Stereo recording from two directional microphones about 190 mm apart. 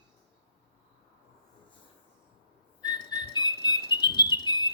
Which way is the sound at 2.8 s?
20° left (ahead or behind).